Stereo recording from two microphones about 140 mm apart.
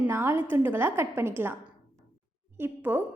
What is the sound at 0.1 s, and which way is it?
A woman's voice, 20° right (ahead or behind).